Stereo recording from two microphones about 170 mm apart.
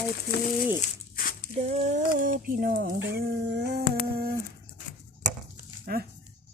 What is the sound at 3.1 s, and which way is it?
Humming, 75° right (ahead or behind).